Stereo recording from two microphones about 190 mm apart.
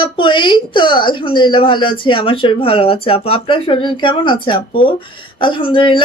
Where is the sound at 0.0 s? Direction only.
25° left (ahead or behind).